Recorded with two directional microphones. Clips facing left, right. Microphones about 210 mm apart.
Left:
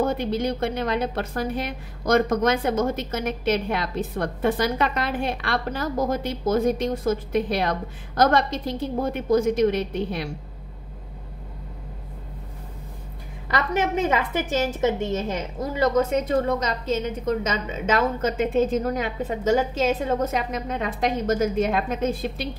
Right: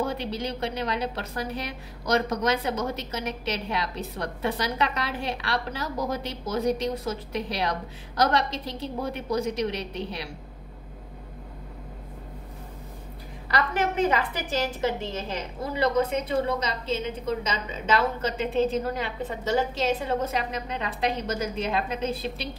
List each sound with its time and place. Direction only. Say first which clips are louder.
0.0 s a woman's voice: left 6 dB; 50° left (ahead or behind)
13.9 s a woman's voice: left 2 dB; 45° left (ahead or behind)